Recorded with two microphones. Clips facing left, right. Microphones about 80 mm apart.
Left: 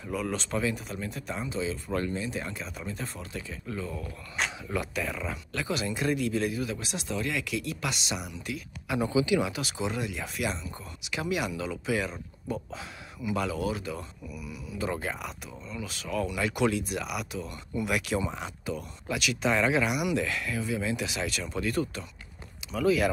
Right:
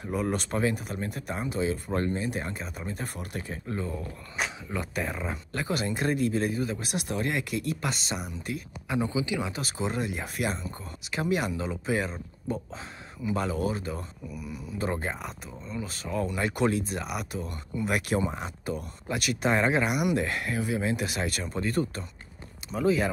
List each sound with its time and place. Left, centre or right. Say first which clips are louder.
0.0 s speech: right 3 dB; right
1.9 s speech: right 2 dB; right
3.6 s speech: right 2 dB; right
4.4 s a sound: even; centre
4.9 s speech: right 1 dB; right
6.9 s speech: right 2 dB; right
8.8 s speech: left 2 dB; right
9.5 s speech: right 1 dB; right
14.9 s speech: right 1 dB; right